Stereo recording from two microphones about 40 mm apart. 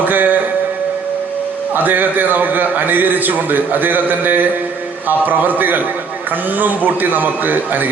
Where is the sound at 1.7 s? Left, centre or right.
Right.